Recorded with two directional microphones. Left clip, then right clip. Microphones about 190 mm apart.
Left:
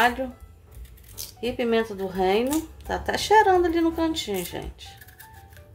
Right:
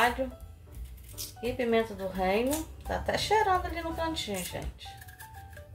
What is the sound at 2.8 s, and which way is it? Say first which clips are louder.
Speech: left 5 dB; 70° left (ahead or behind).